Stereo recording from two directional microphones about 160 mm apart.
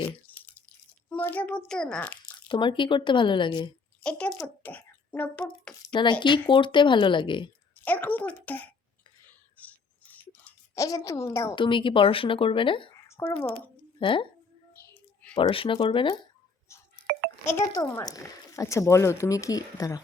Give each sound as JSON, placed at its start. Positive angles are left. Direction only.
{"t": 0.0, "sound": "drip", "side_deg": 10}
{"t": 1.1, "sound": "a child's voice", "side_deg": 10}
{"t": 2.5, "sound": "speech", "side_deg": 30}
{"t": 4.0, "sound": "speech", "side_deg": 5}
{"t": 5.9, "sound": "speech", "side_deg": 30}
{"t": 7.9, "sound": "a child's voice", "side_deg": 10}
{"t": 9.6, "sound": "scissors", "side_deg": 10}
{"t": 10.8, "sound": "speech", "side_deg": 20}
{"t": 11.5, "sound": "speech", "side_deg": 30}
{"t": 13.1, "sound": "speech", "side_deg": 15}
{"t": 14.0, "sound": "speech", "side_deg": 35}
{"t": 14.9, "sound": "a sound", "side_deg": 10}
{"t": 15.4, "sound": "speech", "side_deg": 35}
{"t": 17.7, "sound": "speech", "side_deg": 25}